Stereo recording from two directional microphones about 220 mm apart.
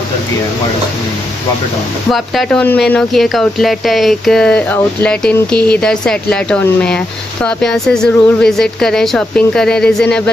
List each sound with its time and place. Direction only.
2.0 s speech: centre (ahead or behind)